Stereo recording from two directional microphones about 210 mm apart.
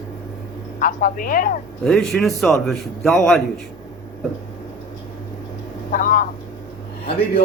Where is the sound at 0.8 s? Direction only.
40° left (ahead or behind).